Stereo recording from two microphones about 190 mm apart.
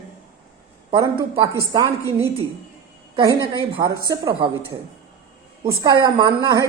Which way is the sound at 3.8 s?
20° right (ahead or behind).